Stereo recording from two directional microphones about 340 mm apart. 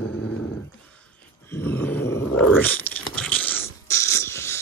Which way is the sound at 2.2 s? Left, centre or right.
Left.